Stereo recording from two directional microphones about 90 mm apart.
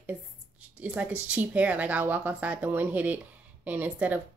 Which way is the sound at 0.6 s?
15° right (ahead or behind).